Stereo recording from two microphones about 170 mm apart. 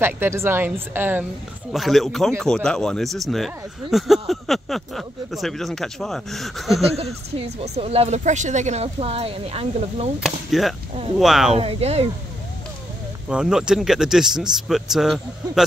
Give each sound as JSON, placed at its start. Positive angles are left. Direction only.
{"t": 0.0, "sound": "speech", "side_deg": -15}
{"t": 1.7, "sound": "speech", "side_deg": 0}
{"t": 7.3, "sound": "speech", "side_deg": -40}
{"t": 10.2, "sound": "speech", "side_deg": 0}
{"t": 11.5, "sound": "speech", "side_deg": -35}
{"t": 13.3, "sound": "speech", "side_deg": -5}